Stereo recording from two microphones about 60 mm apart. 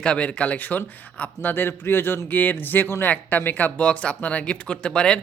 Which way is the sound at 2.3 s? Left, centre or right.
Left.